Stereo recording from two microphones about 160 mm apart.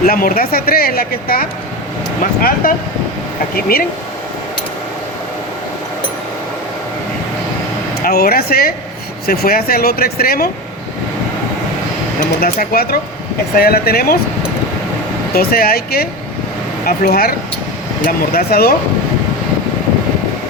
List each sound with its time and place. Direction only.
0.0 s speech: 65° left (ahead or behind)
2.6 s speech: 65° left (ahead or behind)
8.0 s speech: 75° left (ahead or behind)
12.4 s speech: 70° left (ahead or behind)
15.3 s speech: 70° left (ahead or behind)